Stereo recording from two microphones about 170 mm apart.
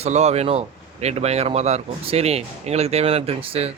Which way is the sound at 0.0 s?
40° right (ahead or behind).